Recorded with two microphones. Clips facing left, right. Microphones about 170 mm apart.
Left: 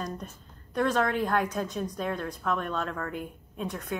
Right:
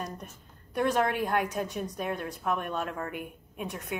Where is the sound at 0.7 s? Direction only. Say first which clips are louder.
Left 1 dB; 15° right (ahead or behind).